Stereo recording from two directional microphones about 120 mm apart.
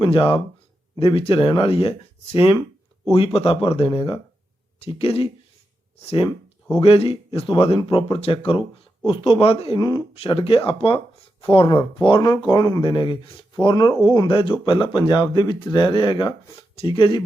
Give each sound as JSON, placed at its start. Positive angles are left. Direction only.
{"t": 0.0, "sound": "speech", "side_deg": 45}
{"t": 6.2, "sound": "a sound", "side_deg": 35}
{"t": 6.8, "sound": "speech", "side_deg": 50}
{"t": 9.7, "sound": "speech", "side_deg": 35}
{"t": 10.2, "sound": "speech", "side_deg": 50}
{"t": 12.5, "sound": "speech", "side_deg": 30}
{"t": 12.8, "sound": "speech", "side_deg": 45}